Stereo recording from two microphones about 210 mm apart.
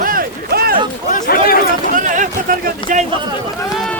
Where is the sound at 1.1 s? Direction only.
40° left (ahead or behind).